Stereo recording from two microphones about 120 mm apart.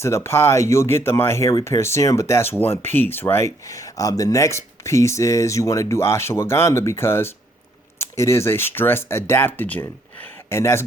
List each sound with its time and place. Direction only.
0.0 s speech: 20° left (ahead or behind)